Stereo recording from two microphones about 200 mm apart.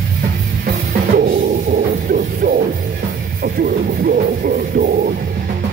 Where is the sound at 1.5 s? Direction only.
40° right (ahead or behind).